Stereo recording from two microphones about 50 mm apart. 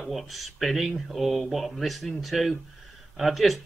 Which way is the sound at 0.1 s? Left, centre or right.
Centre.